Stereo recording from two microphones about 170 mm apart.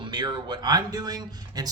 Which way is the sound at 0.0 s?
25° right (ahead or behind).